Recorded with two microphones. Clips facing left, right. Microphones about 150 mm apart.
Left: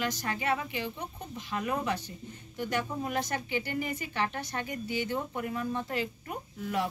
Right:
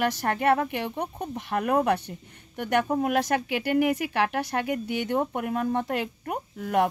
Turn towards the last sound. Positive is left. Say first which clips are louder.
# right 8 dB
turn(degrees=-60)  # may be behind; listen again after turning